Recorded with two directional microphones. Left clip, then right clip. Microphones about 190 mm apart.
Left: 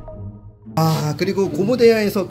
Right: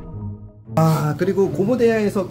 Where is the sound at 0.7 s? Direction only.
Centre (ahead or behind); by 2.3 s 20° left (ahead or behind).